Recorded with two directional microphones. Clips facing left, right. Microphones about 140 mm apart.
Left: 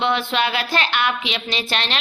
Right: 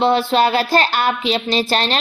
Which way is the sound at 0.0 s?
35° right (ahead or behind).